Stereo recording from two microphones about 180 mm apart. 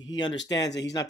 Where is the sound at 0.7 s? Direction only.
75° left (ahead or behind).